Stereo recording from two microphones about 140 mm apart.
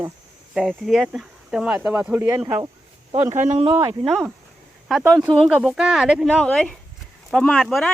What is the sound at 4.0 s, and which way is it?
Speech, centre (ahead or behind).